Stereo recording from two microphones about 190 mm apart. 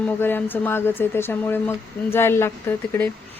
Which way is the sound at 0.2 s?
10° left (ahead or behind).